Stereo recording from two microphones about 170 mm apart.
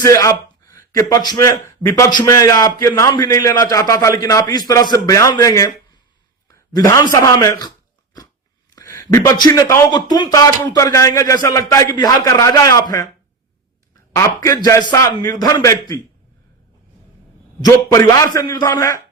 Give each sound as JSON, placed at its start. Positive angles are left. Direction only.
{"t": 0.0, "sound": "a man's voice", "side_deg": 20}
{"t": 8.7, "sound": "a man's voice", "side_deg": 20}
{"t": 14.2, "sound": "a man's voice", "side_deg": 20}
{"t": 17.6, "sound": "a man's voice", "side_deg": 20}